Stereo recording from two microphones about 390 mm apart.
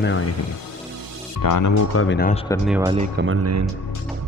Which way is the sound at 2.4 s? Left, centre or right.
Centre.